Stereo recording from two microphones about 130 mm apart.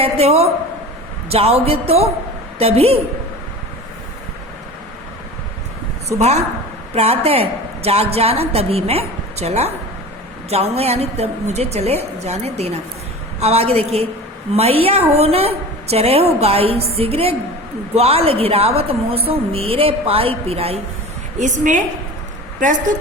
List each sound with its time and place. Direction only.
0.0 s a woman's voice: 50° right (ahead or behind)
6.1 s a woman's voice: 55° right (ahead or behind)
21.3 s a woman's voice: 70° right (ahead or behind)